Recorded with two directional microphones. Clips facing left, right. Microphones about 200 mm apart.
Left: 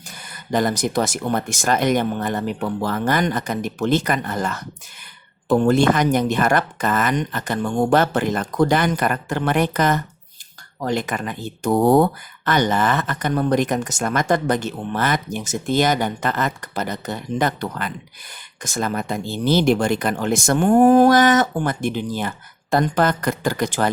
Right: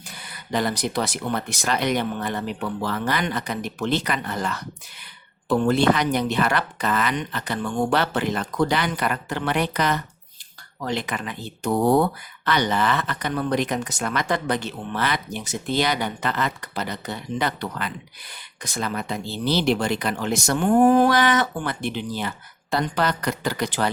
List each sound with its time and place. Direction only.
0.1 s speech: 45° left (ahead or behind)